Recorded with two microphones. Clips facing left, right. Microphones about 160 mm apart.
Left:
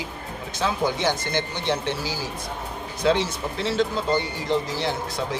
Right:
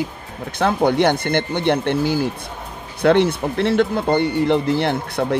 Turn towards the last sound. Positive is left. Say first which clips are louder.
# right 7 dB
turn(degrees=-60)  # may be behind; listen again after turning